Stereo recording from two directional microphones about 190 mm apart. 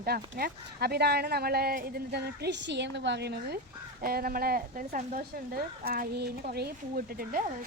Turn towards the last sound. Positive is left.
turn(degrees=-50)  # may be behind; listen again after turning